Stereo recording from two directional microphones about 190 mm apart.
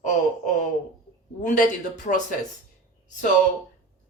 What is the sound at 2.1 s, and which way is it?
Speech, 40° left (ahead or behind).